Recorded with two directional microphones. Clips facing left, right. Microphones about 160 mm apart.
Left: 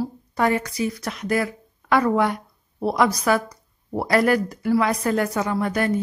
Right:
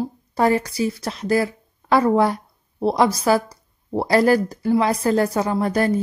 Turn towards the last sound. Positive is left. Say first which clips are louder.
# right 3 dB
turn(degrees=-35)  # may be behind; listen again after turning